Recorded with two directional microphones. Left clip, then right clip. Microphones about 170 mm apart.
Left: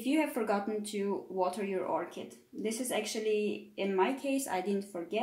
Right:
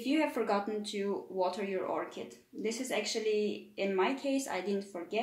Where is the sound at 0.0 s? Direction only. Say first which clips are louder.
Even; 45° left (ahead or behind).